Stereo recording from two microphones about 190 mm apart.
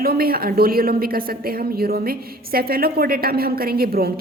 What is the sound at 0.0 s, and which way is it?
Speech, 50° right (ahead or behind).